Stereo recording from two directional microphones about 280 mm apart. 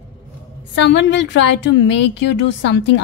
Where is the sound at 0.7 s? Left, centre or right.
Left.